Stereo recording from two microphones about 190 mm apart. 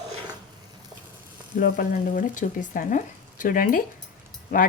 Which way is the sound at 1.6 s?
45° left (ahead or behind).